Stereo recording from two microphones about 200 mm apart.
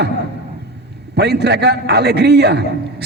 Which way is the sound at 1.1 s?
55° right (ahead or behind).